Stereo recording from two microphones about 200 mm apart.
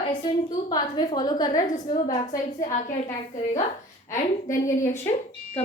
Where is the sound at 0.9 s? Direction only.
20° left (ahead or behind).